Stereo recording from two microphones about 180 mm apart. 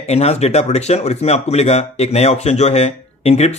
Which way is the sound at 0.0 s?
35° left (ahead or behind).